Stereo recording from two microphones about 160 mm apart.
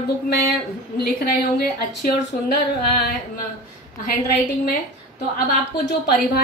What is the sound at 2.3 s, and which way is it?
Speech, 60° left (ahead or behind).